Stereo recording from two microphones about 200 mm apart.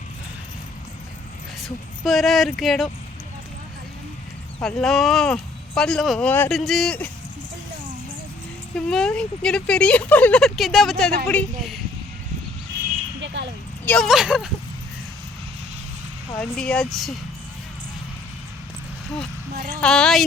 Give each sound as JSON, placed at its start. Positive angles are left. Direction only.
{"t": 1.6, "sound": "speech", "side_deg": 0}
{"t": 4.6, "sound": "speech", "side_deg": 0}
{"t": 8.7, "sound": "speech", "side_deg": 5}
{"t": 13.4, "sound": "a sound", "side_deg": -65}
{"t": 13.8, "sound": "speech", "side_deg": 5}
{"t": 16.4, "sound": "speech", "side_deg": 5}
{"t": 19.8, "sound": "speech", "side_deg": 5}